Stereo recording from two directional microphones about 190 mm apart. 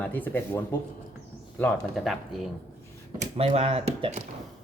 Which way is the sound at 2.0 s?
Centre (ahead or behind).